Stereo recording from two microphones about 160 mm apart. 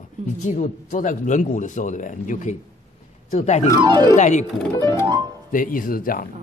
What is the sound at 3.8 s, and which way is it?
Speech, 30° right (ahead or behind).